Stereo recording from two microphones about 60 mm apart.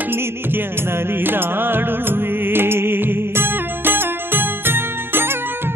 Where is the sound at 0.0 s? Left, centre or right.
Right.